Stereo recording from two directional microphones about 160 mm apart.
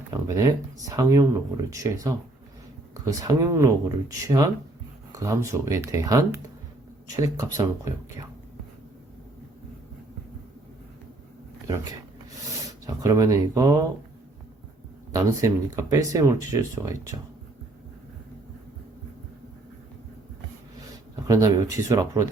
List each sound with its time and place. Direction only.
0.3 s speech: 20° right (ahead or behind)
12.5 s speech: 20° right (ahead or behind)
15.1 s speech: 20° right (ahead or behind)
21.2 s speech: 20° right (ahead or behind)